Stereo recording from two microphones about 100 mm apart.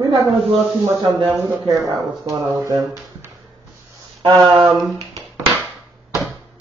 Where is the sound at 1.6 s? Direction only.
40° right (ahead or behind).